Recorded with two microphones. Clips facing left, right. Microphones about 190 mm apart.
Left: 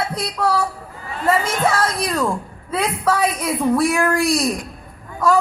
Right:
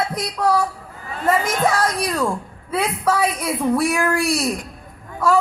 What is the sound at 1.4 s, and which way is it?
A woman's voice, 10° right (ahead or behind).